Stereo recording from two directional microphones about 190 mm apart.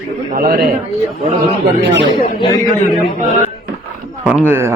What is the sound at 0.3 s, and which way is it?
Speech, 50° right (ahead or behind).